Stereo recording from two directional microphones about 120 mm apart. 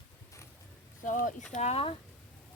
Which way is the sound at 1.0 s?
90° left.